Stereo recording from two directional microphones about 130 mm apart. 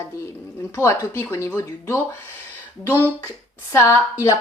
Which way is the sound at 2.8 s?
15° left (ahead or behind).